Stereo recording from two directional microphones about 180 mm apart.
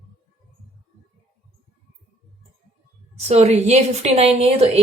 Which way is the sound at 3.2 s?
35° right (ahead or behind).